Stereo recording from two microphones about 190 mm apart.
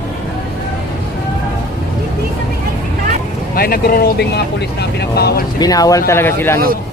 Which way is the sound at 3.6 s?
50° left (ahead or behind).